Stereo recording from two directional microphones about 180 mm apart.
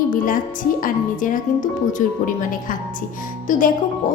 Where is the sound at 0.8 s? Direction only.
50° left (ahead or behind).